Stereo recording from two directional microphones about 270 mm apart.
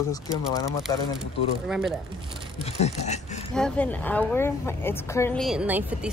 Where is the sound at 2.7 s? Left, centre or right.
Left.